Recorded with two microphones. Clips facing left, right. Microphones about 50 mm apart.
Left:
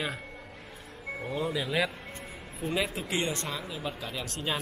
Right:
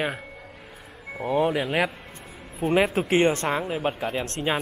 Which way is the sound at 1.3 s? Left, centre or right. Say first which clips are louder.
Right 9 dB; right.